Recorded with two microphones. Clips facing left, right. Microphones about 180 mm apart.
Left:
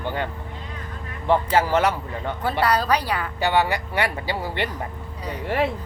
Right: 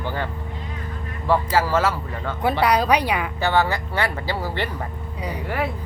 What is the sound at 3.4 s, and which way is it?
Speech, 15° left (ahead or behind).